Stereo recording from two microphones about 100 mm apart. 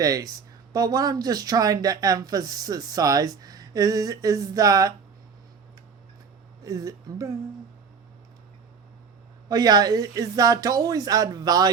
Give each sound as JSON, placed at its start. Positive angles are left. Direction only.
{"t": 0.0, "sound": "speech", "side_deg": -35}
{"t": 6.6, "sound": "speech", "side_deg": -35}
{"t": 9.5, "sound": "speech", "side_deg": -40}